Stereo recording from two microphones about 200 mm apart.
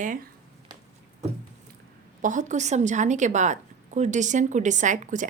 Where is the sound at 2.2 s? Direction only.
40° right (ahead or behind).